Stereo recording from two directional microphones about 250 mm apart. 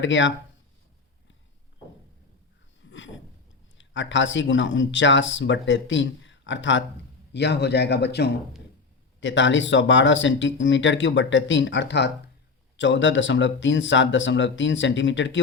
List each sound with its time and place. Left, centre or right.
0.0 s speech: left
2.8 s a sound: left
3.8 s speech: left